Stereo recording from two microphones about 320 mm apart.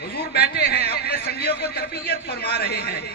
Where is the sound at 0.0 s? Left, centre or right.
Left.